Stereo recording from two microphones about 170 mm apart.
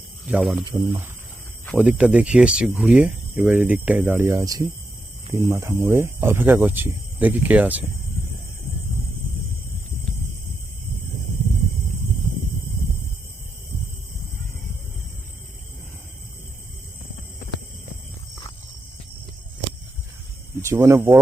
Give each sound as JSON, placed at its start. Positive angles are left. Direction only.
{"t": 0.3, "sound": "speech", "side_deg": -5}
{"t": 0.7, "sound": "speech", "side_deg": -15}
{"t": 20.6, "sound": "speech", "side_deg": -15}